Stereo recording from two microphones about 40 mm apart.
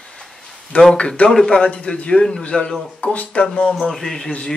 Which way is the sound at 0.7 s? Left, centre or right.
Left.